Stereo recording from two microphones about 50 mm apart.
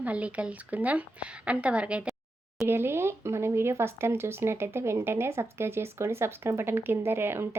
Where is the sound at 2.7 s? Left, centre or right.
Right.